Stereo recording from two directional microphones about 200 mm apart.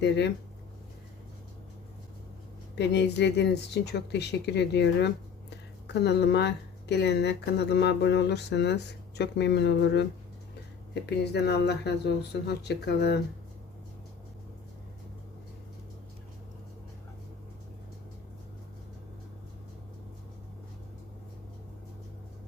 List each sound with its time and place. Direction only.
2.7 s speech: 60° left (ahead or behind)
11.3 s speech: 55° left (ahead or behind)